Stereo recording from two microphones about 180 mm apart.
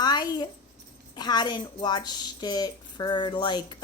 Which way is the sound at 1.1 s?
25° left (ahead or behind).